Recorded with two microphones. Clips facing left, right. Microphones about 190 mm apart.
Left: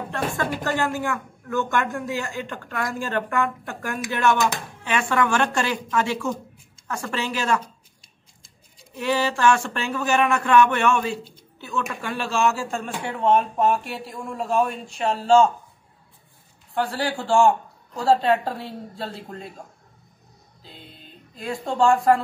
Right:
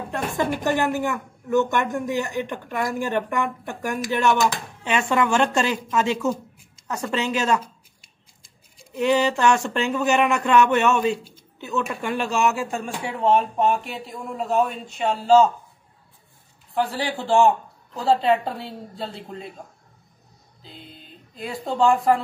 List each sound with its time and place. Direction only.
0.1 s speech: 20° right (ahead or behind)
9.0 s speech: 20° right (ahead or behind)
13.0 s a man's voice: 5° right (ahead or behind)
16.7 s a man's voice: centre (ahead or behind)
20.6 s speech: centre (ahead or behind)